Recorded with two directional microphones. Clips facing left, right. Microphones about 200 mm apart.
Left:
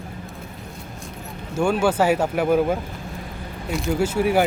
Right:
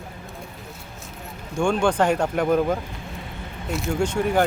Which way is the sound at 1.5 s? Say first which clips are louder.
Left 1 dB; 5° left (ahead or behind).